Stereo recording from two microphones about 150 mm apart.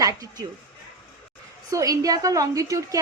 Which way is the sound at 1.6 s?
25° right (ahead or behind).